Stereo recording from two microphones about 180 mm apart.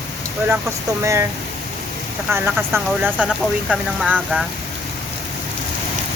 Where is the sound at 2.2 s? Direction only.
15° right (ahead or behind).